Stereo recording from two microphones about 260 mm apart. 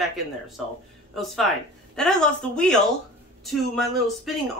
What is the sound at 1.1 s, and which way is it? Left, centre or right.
Speech, centre.